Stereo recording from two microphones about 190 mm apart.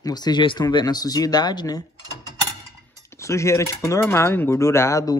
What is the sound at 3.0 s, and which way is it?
Cutlery, 15° left (ahead or behind).